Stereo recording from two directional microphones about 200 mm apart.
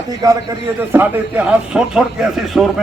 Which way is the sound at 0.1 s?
20° right (ahead or behind).